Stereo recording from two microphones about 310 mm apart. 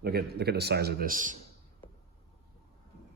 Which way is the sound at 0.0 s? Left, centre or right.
Right.